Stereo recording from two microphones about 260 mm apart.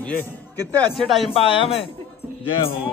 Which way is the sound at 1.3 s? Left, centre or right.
Left.